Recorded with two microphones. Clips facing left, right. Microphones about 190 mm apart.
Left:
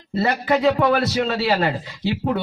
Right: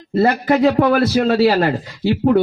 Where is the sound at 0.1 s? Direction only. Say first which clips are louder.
Right 5 dB; 45° right (ahead or behind).